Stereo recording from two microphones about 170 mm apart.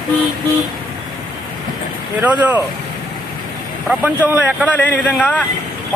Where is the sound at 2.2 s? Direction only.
10° right (ahead or behind).